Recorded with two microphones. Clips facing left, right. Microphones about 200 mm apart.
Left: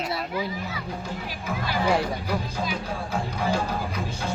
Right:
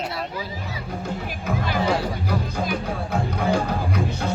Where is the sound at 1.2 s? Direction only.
55° right (ahead or behind).